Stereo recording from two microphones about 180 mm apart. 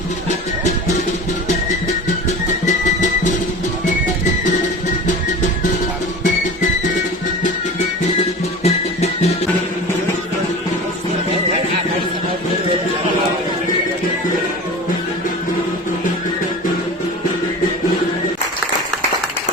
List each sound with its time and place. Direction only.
8.6 s music: 35° left (ahead or behind)